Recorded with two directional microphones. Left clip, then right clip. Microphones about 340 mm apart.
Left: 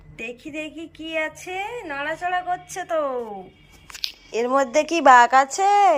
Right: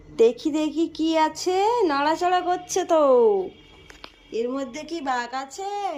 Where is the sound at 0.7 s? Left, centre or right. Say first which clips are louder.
Right 9 dB; centre.